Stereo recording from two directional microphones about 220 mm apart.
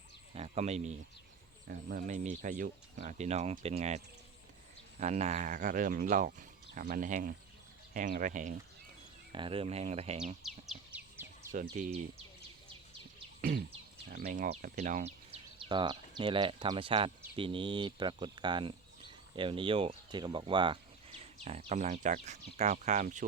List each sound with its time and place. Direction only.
0.3 s speech: 30° right (ahead or behind)
9.3 s speech: 25° right (ahead or behind)
10.4 s a sound: 5° right (ahead or behind)
11.5 s speech: 40° right (ahead or behind)
13.4 s a sound: 55° right (ahead or behind)
14.1 s speech: 40° right (ahead or behind)